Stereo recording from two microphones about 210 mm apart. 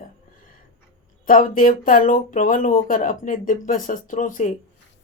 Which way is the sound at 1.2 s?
40° left (ahead or behind).